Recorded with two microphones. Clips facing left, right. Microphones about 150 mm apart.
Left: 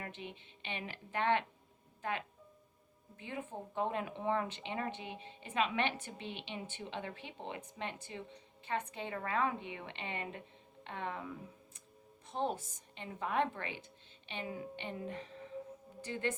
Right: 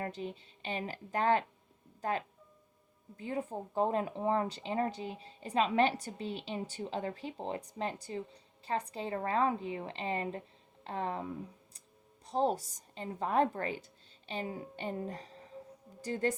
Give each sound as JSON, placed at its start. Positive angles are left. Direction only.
{"t": 0.0, "sound": "a woman's voice", "side_deg": -40}